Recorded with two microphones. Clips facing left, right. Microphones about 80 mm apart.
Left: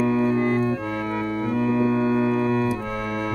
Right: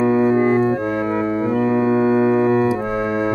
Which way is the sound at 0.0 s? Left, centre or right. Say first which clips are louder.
Right 5 dB; right.